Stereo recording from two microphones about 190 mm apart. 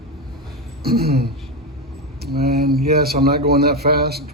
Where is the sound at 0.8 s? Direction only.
55° right (ahead or behind).